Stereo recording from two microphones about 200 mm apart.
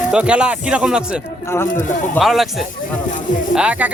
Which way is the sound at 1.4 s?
10° left (ahead or behind).